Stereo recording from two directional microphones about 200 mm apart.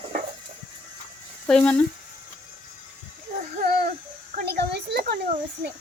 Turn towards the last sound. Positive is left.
turn(degrees=-50)  # may be behind; listen again after turning